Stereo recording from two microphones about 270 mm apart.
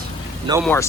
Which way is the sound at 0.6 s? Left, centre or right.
Centre.